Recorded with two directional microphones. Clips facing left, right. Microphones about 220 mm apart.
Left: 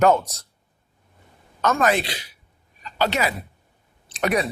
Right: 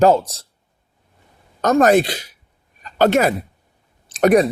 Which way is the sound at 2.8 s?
50° right (ahead or behind).